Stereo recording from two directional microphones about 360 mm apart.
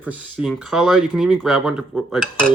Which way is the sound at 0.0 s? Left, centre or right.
Centre.